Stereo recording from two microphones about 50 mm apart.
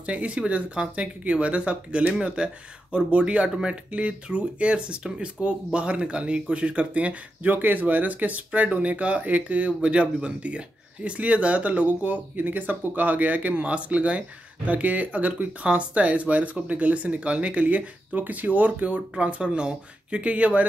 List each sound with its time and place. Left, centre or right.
0.0 s speech: right
7.5 s speech: right